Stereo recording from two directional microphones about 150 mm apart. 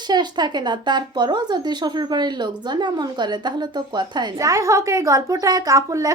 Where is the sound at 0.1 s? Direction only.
30° right (ahead or behind).